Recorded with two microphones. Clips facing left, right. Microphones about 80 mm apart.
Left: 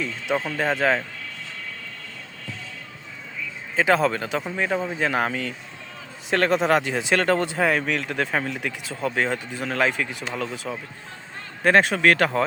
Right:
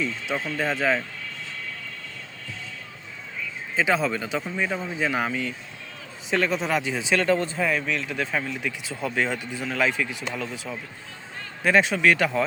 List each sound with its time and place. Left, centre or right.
0.4 s speech: left
3.8 s speech: left
9.1 s speech: left